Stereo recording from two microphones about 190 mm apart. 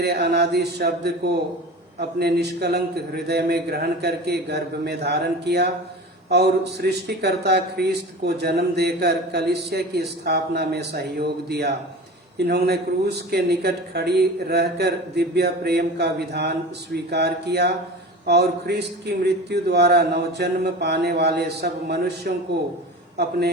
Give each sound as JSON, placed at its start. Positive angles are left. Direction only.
{"t": 0.0, "sound": "a man's voice", "side_deg": -60}